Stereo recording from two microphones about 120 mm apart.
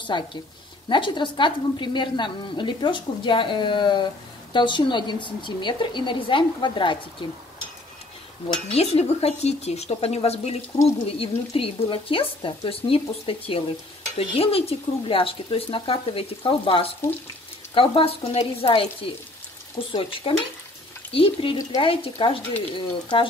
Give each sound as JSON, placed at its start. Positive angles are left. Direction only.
{"t": 0.0, "sound": "a woman's voice", "side_deg": 40}
{"t": 8.7, "sound": "speech", "side_deg": 60}